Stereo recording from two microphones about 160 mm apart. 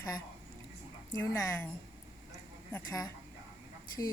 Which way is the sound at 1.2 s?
20° left (ahead or behind).